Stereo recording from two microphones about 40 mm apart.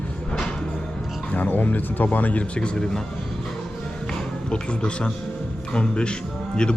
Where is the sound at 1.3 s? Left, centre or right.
Left.